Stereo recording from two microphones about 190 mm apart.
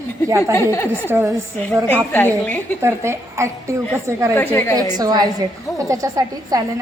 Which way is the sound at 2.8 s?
15° right (ahead or behind).